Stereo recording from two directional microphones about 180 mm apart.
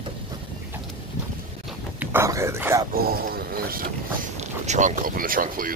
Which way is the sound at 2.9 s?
55° right (ahead or behind).